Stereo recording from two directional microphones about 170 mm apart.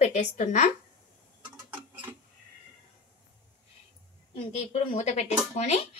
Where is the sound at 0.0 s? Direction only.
40° left (ahead or behind).